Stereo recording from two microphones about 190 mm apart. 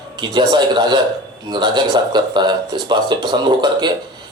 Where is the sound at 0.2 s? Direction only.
25° right (ahead or behind).